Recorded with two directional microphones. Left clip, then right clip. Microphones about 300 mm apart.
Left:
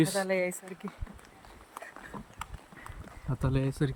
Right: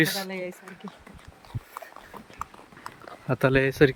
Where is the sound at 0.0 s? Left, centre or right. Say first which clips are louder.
Right 1 dB; centre.